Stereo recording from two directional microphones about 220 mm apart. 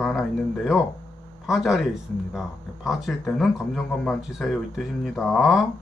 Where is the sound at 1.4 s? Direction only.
Centre (ahead or behind).